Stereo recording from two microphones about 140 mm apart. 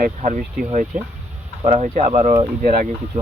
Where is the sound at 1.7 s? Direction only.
55° right (ahead or behind).